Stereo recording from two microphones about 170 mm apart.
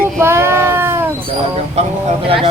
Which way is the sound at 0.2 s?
15° right (ahead or behind).